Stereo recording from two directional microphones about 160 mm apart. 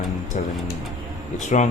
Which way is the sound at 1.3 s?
50° left (ahead or behind).